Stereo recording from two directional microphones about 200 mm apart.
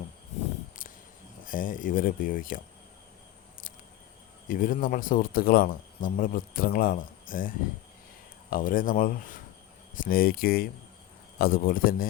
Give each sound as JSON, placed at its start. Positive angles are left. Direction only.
{"t": 1.5, "sound": "speech", "side_deg": 45}
{"t": 4.4, "sound": "speech", "side_deg": 45}